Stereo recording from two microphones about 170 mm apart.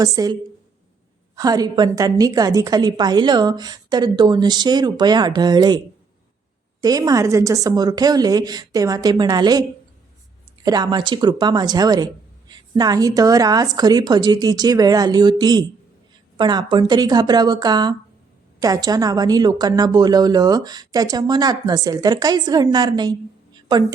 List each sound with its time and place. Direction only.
0.0 s a woman's voice: 20° right (ahead or behind)
1.4 s a woman's voice: 20° right (ahead or behind)
6.8 s a woman's voice: 20° right (ahead or behind)
23.6 s a sound: 25° right (ahead or behind)